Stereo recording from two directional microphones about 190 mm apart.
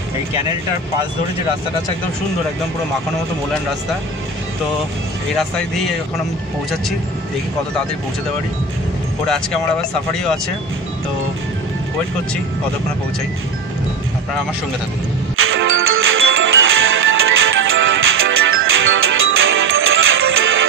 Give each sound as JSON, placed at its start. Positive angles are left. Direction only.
{"t": 9.3, "sound": "speech", "side_deg": 5}
{"t": 15.3, "sound": "music", "side_deg": -90}